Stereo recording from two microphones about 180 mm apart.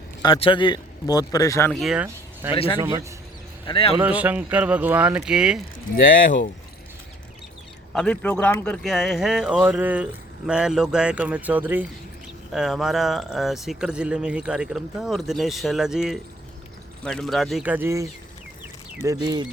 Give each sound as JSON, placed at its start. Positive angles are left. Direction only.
{"t": 0.2, "sound": "a man's voice", "side_deg": 30}
{"t": 1.7, "sound": "speech", "side_deg": 0}
{"t": 2.5, "sound": "a man's voice", "side_deg": 30}
{"t": 2.8, "sound": "speech", "side_deg": -15}
{"t": 3.7, "sound": "a man's voice", "side_deg": 30}
{"t": 4.0, "sound": "speech", "side_deg": -10}
{"t": 6.0, "sound": "speech", "side_deg": 50}
{"t": 7.9, "sound": "speech", "side_deg": 5}